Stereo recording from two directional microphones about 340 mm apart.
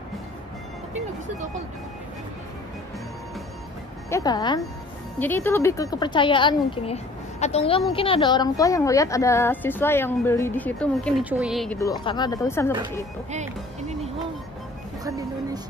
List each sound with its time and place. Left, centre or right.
4.1 s a woman's voice: centre
13.3 s speech: centre